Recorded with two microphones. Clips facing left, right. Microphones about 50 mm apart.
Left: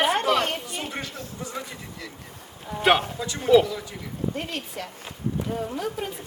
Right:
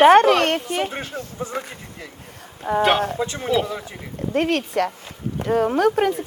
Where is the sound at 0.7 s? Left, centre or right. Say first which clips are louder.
Right 8 dB; right.